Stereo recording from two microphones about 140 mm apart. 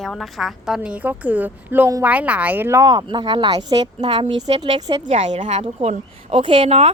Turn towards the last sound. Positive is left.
turn(degrees=-45)  # may be behind; listen again after turning